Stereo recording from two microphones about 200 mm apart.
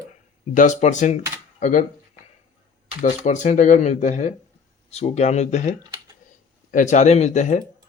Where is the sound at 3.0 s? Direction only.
40° left (ahead or behind).